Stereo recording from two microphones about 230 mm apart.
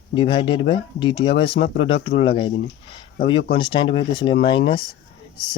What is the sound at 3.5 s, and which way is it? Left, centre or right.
Speech, left.